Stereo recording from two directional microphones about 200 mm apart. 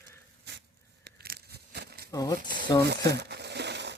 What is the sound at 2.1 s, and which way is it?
Speech, 15° left (ahead or behind).